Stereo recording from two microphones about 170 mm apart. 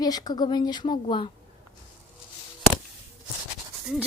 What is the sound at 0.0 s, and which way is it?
A woman's voice, 25° left (ahead or behind).